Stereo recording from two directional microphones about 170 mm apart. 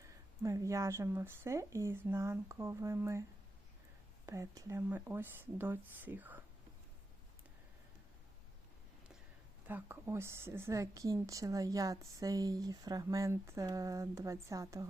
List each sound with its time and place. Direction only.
0.0 s speech: 20° right (ahead or behind)
4.3 s speech: 20° right (ahead or behind)
9.6 s a woman's voice: 10° right (ahead or behind)